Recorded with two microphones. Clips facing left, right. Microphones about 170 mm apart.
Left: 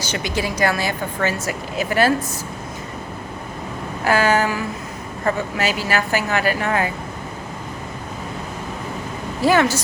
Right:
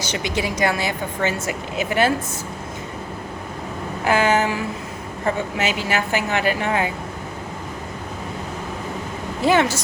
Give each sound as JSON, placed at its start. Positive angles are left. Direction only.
{"t": 0.0, "sound": "a woman's voice", "side_deg": -25}
{"t": 4.0, "sound": "a woman's voice", "side_deg": -25}
{"t": 9.5, "sound": "a woman's voice", "side_deg": -25}